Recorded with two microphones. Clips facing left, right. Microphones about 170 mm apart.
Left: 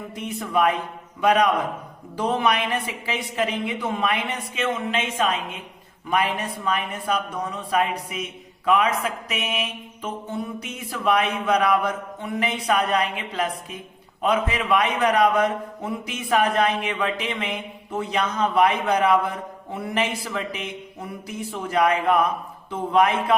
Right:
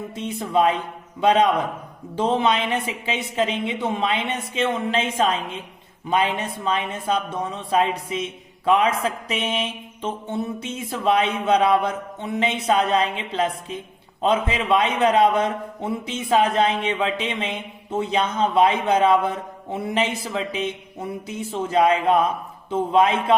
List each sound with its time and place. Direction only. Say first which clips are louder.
0.2 s a man's voice: right 2 dB; 25° right (ahead or behind)